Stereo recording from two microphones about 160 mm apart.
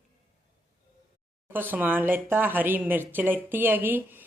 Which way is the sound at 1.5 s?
10° right (ahead or behind).